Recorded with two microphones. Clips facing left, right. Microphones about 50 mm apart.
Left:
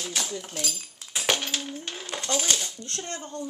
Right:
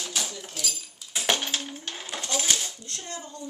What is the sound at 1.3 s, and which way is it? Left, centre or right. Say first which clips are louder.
Coin: right 1 dB; right.